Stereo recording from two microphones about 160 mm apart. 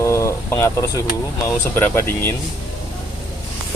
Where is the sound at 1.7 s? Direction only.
15° left (ahead or behind).